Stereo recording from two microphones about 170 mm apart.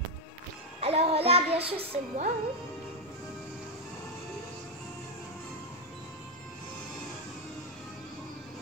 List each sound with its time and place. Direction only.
0.7 s child singing: 35° right (ahead or behind)
1.7 s speech: 40° right (ahead or behind)